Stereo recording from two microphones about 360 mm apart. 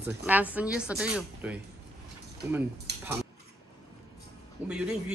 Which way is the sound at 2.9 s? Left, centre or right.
Right.